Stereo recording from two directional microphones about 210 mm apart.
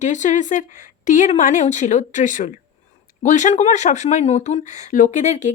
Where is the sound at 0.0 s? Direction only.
35° left (ahead or behind).